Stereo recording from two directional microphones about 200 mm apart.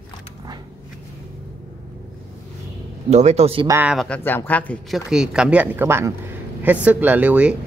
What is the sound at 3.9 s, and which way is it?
Speech, 5° left (ahead or behind).